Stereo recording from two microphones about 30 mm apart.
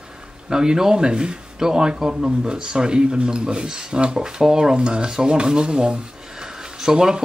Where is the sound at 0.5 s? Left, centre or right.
Right.